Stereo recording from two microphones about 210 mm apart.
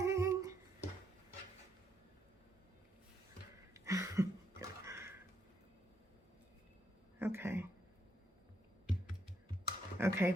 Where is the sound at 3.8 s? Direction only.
15° right (ahead or behind).